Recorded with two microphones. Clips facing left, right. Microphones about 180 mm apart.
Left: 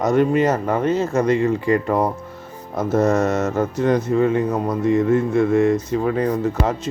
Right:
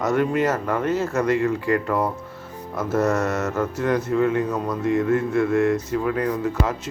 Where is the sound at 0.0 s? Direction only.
20° left (ahead or behind).